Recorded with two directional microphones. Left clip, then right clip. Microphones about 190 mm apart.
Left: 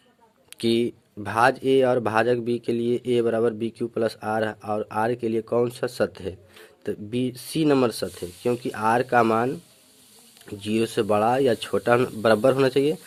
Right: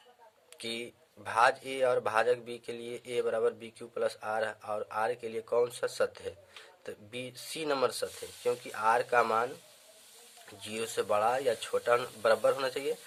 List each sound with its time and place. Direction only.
0.5 s speech: 45° left (ahead or behind)